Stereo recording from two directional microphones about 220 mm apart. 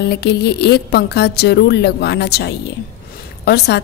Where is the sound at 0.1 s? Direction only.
50° left (ahead or behind).